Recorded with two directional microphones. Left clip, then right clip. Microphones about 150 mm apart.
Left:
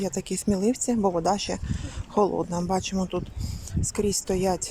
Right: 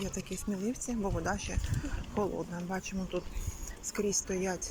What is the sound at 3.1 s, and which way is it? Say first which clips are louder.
Speech: left 6 dB; 25° left (ahead or behind).